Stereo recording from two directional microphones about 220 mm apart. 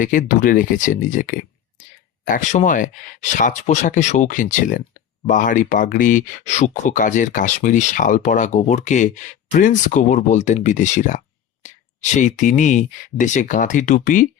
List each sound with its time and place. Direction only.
0.0 s speech: 35° left (ahead or behind)